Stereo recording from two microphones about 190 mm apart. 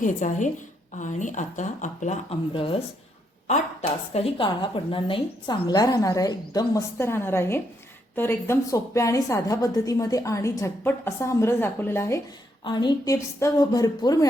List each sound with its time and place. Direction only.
0.0 s speech: 40° left (ahead or behind)
2.5 s a woman's voice: 30° left (ahead or behind)